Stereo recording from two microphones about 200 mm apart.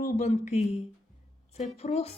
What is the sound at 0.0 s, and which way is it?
Speech, 40° left (ahead or behind).